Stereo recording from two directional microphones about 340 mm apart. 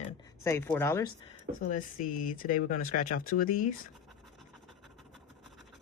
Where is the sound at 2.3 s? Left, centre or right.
Left.